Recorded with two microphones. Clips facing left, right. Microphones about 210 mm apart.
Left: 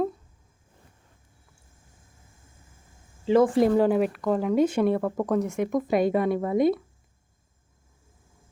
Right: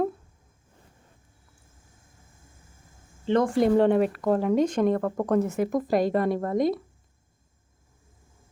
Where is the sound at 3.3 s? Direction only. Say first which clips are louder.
Left 2 dB; 5° left (ahead or behind).